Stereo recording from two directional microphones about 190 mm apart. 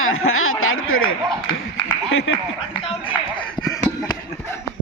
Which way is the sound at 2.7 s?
25° left (ahead or behind).